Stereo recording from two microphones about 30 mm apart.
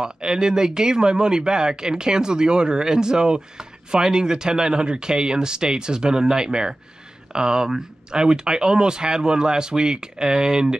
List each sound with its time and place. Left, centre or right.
0.0 s speech: right